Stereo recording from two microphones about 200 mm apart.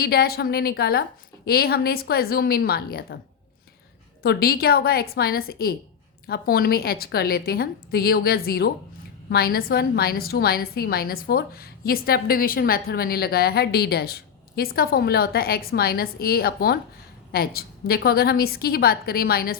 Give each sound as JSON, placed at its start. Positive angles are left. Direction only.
{"t": 0.0, "sound": "a woman's voice", "side_deg": 50}
{"t": 4.2, "sound": "a woman's voice", "side_deg": 50}